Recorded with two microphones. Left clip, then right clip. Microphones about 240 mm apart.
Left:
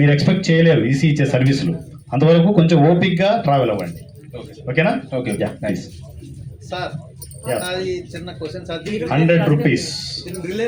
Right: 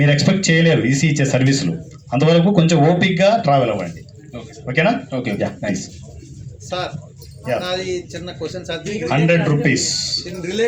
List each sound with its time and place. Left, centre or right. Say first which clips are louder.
0.0 s speech: right 1 dB; right
4.6 s speech: right 1 dB; right
7.4 s speech: right 1 dB; right